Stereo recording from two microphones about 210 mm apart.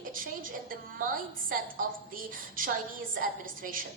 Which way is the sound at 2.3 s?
40° right (ahead or behind).